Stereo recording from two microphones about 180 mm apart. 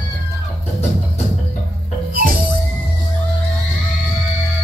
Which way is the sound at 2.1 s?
50° right (ahead or behind).